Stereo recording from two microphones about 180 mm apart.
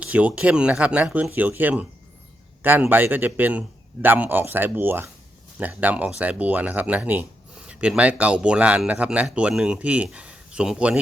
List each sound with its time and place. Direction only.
0.0 s speech: 5° right (ahead or behind)